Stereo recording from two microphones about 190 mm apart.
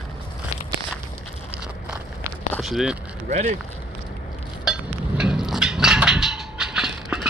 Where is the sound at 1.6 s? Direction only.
5° right (ahead or behind).